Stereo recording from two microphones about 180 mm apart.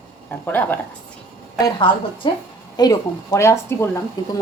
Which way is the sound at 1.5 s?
25° left (ahead or behind).